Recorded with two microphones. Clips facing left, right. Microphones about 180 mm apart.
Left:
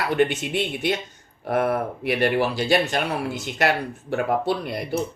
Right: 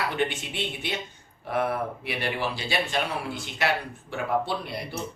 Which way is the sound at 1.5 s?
45° left (ahead or behind).